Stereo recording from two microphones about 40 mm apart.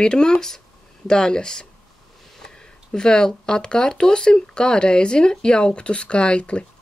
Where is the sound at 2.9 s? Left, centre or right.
Centre.